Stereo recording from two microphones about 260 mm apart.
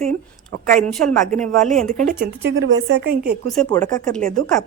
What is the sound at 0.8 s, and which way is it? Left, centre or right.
Speech, centre.